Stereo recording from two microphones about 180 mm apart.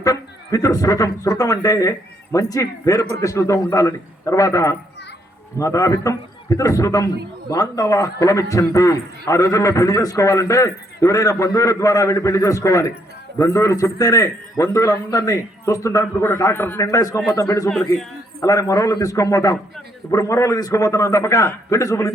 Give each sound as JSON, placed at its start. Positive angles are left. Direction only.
{"t": 0.0, "sound": "a man's voice", "side_deg": 20}
{"t": 17.7, "sound": "a man's voice", "side_deg": 0}
{"t": 18.3, "sound": "a man's voice", "side_deg": 20}